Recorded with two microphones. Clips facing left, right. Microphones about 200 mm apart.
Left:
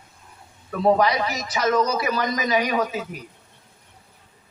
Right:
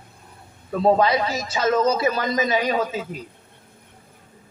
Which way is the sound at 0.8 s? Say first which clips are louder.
Right 1 dB; 25° right (ahead or behind).